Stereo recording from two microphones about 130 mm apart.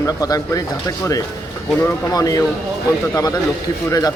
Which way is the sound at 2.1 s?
30° left (ahead or behind).